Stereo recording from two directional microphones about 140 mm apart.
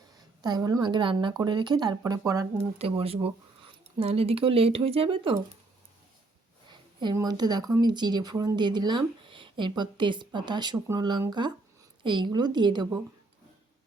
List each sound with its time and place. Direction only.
0.4 s speech: 25° right (ahead or behind)
2.7 s speech: 45° right (ahead or behind)
6.7 s speech: 30° right (ahead or behind)